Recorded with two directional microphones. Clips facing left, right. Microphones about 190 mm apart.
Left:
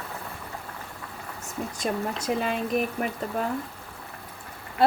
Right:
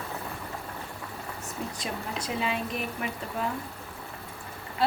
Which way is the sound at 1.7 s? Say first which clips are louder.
Left 6 dB; 45° left (ahead or behind).